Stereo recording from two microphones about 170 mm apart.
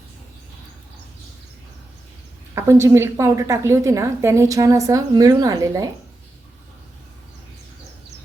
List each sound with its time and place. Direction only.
2.6 s a woman's voice: 15° right (ahead or behind)